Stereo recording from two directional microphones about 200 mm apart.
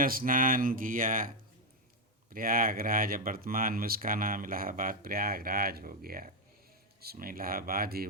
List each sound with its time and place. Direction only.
0.0 s speech: 45° right (ahead or behind)
2.3 s speech: 45° right (ahead or behind)